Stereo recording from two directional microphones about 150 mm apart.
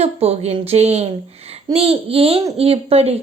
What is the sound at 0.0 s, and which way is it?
A woman's voice, 45° right (ahead or behind).